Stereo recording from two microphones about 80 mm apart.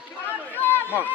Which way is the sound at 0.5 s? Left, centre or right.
Left.